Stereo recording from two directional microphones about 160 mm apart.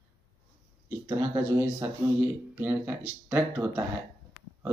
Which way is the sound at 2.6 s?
10° right (ahead or behind).